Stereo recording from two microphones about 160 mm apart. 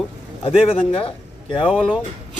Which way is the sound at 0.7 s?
35° left (ahead or behind).